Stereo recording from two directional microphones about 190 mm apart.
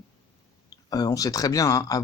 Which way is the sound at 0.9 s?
20° left (ahead or behind).